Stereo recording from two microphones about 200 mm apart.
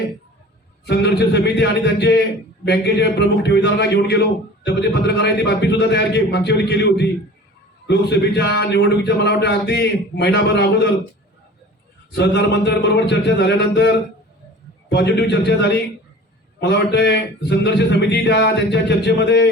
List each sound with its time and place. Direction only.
0.9 s a man's voice: 55° left (ahead or behind)
12.1 s a man's voice: 55° left (ahead or behind)